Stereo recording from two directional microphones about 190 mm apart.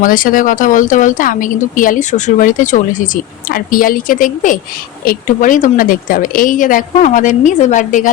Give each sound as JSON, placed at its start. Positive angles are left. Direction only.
{"t": 0.0, "sound": "a woman's voice", "side_deg": 45}